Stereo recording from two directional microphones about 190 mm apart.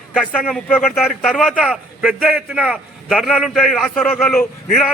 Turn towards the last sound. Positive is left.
turn(degrees=5)  # may be behind; listen again after turning